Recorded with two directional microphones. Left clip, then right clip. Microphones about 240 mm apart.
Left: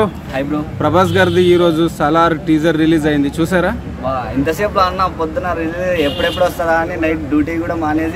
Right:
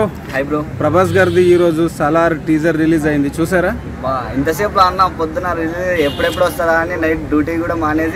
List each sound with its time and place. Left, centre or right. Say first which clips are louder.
0.0 s a man's voice: even; centre